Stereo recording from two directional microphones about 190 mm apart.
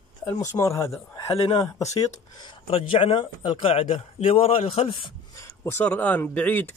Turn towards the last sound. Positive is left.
turn(degrees=10)  # may be behind; listen again after turning